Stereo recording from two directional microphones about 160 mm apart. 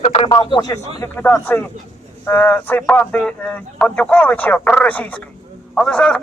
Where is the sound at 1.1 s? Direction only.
10° left (ahead or behind).